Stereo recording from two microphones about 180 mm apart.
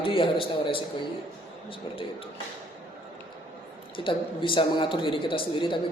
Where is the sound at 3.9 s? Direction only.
30° left (ahead or behind).